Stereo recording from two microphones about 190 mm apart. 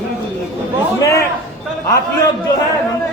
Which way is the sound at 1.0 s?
15° left (ahead or behind).